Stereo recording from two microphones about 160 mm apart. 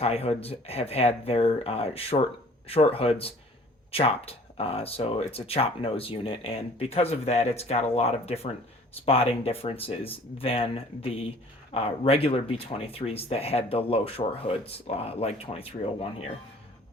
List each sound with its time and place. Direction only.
0.0 s speech: 40° left (ahead or behind)